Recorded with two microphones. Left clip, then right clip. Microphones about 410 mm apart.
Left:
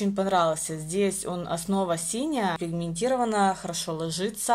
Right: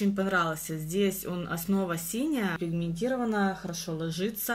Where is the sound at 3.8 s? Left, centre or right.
Left.